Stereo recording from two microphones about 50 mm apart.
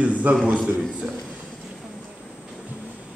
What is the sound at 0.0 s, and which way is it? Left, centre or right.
Speech, right.